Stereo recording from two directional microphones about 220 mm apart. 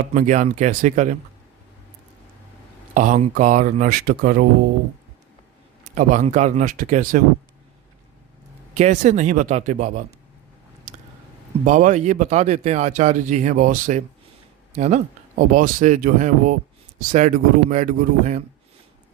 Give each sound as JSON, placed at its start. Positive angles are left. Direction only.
{"t": 0.1, "sound": "speech", "side_deg": -35}
{"t": 2.9, "sound": "speech", "side_deg": -35}
{"t": 5.8, "sound": "speech", "side_deg": -35}
{"t": 8.8, "sound": "speech", "side_deg": -35}
{"t": 10.9, "sound": "a sound", "side_deg": -35}
{"t": 11.6, "sound": "speech", "side_deg": -35}